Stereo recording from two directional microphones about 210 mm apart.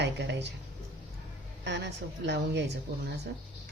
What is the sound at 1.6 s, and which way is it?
A woman's voice, 55° right (ahead or behind).